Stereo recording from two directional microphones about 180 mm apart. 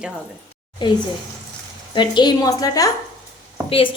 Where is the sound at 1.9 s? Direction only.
25° left (ahead or behind).